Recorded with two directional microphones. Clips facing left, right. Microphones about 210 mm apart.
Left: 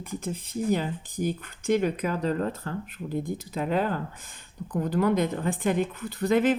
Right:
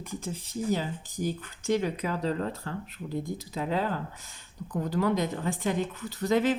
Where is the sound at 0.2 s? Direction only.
55° left (ahead or behind).